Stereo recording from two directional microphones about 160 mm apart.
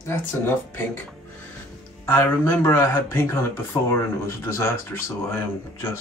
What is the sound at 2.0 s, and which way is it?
Speech, 15° left (ahead or behind).